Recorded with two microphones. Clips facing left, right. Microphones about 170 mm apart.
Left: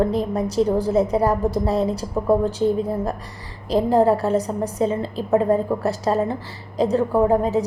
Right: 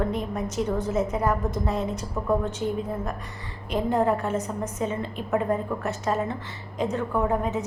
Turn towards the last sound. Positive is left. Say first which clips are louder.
# left 7 dB
turn(degrees=35)  # may be behind; listen again after turning